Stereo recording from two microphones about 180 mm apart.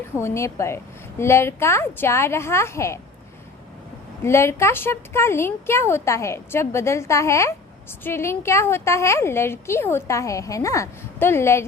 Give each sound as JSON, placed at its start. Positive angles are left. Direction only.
{"t": 0.2, "sound": "a woman's voice", "side_deg": 15}
{"t": 4.2, "sound": "a woman's voice", "side_deg": 15}